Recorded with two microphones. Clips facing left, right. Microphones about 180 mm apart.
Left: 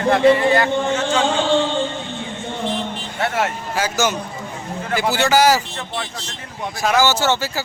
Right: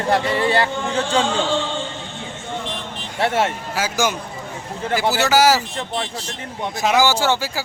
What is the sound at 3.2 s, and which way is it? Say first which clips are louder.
Speech: right 2 dB; 30° right (ahead or behind).